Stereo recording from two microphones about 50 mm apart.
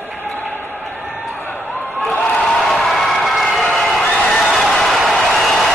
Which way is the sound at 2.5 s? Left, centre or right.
Centre.